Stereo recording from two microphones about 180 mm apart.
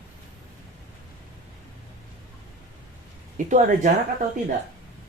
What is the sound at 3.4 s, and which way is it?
Speech, 45° right (ahead or behind).